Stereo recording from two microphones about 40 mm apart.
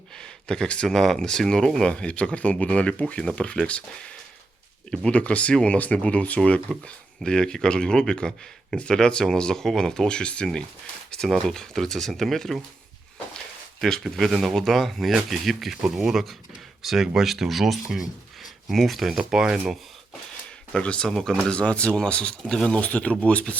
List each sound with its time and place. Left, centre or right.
0.1 s a sound: centre
0.9 s speech: centre
1.9 s speech: left
7.3 s speech: centre
14.2 s speech: centre
18.7 s speech: centre
20.7 s speech: left
21.1 s speech: centre
21.5 s speech: left
22.7 s speech: left